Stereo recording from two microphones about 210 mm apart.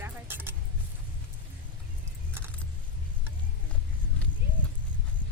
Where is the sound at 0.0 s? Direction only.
10° right (ahead or behind).